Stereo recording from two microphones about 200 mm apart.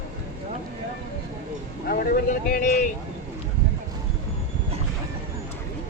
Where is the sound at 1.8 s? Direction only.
45° left (ahead or behind).